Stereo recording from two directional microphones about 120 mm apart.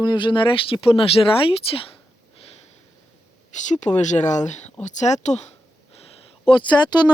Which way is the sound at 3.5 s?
90° left.